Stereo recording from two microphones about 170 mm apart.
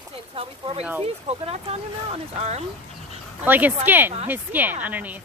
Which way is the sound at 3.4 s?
10° right (ahead or behind).